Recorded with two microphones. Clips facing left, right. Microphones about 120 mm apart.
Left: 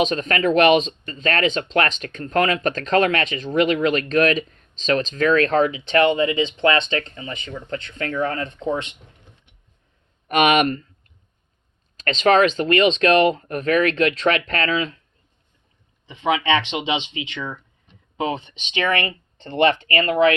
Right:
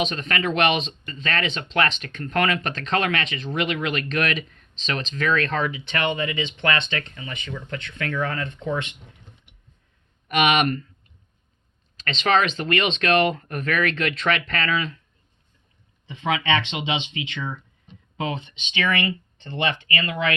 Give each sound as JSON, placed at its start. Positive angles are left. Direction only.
{"t": 0.0, "sound": "speech", "side_deg": 45}
{"t": 10.2, "sound": "speech", "side_deg": 45}
{"t": 11.9, "sound": "speech", "side_deg": 40}
{"t": 16.0, "sound": "speech", "side_deg": 20}
{"t": 18.3, "sound": "speech", "side_deg": 35}